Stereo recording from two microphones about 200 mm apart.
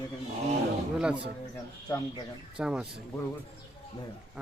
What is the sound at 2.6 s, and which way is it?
Speech, 5° right (ahead or behind).